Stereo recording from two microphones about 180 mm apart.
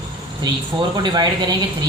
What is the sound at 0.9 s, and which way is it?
Speech, 25° right (ahead or behind).